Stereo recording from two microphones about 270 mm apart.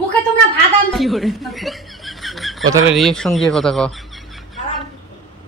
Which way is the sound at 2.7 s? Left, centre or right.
Centre.